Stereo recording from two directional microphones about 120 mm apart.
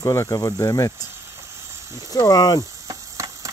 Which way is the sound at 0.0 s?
25° left (ahead or behind).